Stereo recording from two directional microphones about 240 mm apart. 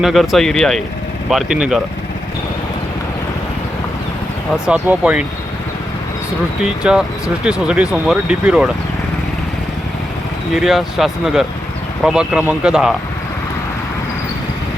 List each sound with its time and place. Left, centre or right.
0.0 s speech: centre
4.6 s speech: centre
6.6 s speech: centre
10.5 s speech: centre